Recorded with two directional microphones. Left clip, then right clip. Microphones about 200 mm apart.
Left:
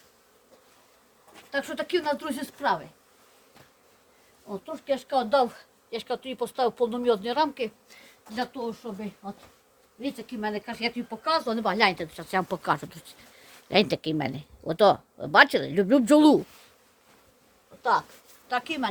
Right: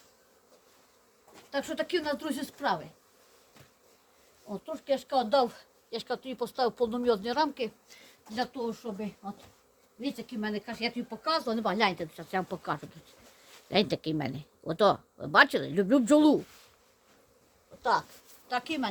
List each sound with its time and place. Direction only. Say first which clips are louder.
1.4 s speech: left 2 dB; 5° left (ahead or behind)
4.4 s speech: left 2 dB; centre (ahead or behind); by 12.5 s 45° left (ahead or behind)
12.6 s speech: left 8 dB; 65° left (ahead or behind)
13.7 s speech: left 5 dB; 15° left (ahead or behind)
18.4 s speech: left 4 dB; 5° left (ahead or behind)